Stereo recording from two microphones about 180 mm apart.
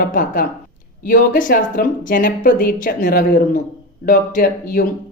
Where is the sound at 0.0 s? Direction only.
50° left (ahead or behind).